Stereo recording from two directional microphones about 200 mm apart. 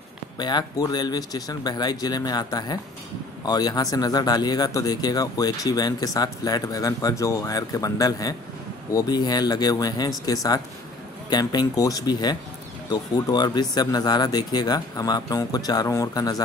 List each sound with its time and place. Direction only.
0.4 s speech: 20° left (ahead or behind)